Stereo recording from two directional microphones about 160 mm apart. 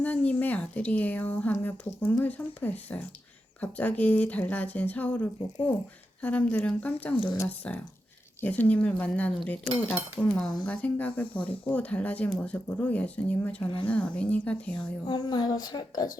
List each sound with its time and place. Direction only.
0.0 s speech: 10° left (ahead or behind)
13.7 s speech: 35° left (ahead or behind)
13.9 s speech: 10° left (ahead or behind)
15.0 s a woman's voice: 25° left (ahead or behind)